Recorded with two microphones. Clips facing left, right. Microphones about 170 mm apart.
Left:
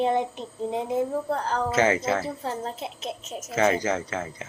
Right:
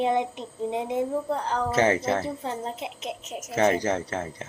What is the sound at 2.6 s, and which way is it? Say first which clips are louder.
Speech: even; 20° right (ahead or behind).